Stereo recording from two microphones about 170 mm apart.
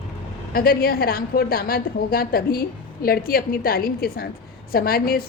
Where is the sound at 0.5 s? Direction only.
60° left (ahead or behind).